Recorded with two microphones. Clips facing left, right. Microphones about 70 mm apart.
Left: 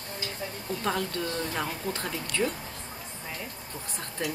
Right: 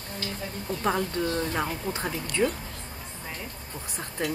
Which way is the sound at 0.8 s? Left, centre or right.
Centre.